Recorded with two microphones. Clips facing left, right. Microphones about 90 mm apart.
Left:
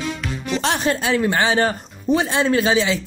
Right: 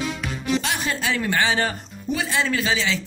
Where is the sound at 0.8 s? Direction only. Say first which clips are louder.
Left 6 dB; 30° left (ahead or behind).